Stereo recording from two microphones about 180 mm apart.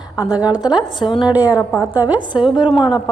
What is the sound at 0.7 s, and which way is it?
Speech, 25° left (ahead or behind).